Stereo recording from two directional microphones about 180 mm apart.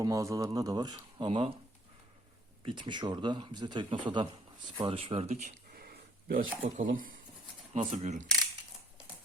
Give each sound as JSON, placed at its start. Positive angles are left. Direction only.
{"t": 0.0, "sound": "speech", "side_deg": -15}
{"t": 2.6, "sound": "speech", "side_deg": -25}
{"t": 4.8, "sound": "a sound", "side_deg": -30}
{"t": 6.7, "sound": "speech", "side_deg": -50}
{"t": 7.7, "sound": "speech", "side_deg": -40}